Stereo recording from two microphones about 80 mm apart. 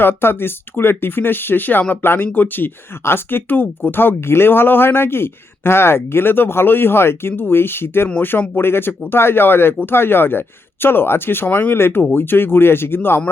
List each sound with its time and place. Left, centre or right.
0.0 s speech: left